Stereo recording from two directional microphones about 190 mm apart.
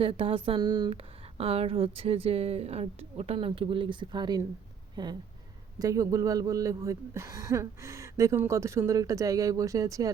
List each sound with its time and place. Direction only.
0.0 s a woman's voice: 30° right (ahead or behind)